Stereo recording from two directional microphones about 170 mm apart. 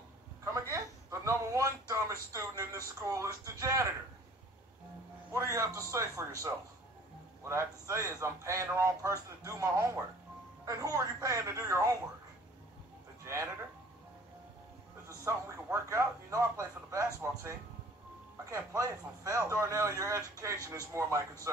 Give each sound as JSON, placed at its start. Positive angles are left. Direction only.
{"t": 0.5, "sound": "a sound", "side_deg": -20}
{"t": 3.4, "sound": "a man's voice", "side_deg": -15}
{"t": 5.3, "sound": "a man's voice", "side_deg": -15}
{"t": 7.4, "sound": "a man's voice", "side_deg": -15}
{"t": 13.2, "sound": "speech", "side_deg": -15}
{"t": 15.2, "sound": "a man's voice", "side_deg": -15}
{"t": 18.8, "sound": "a man's voice", "side_deg": -20}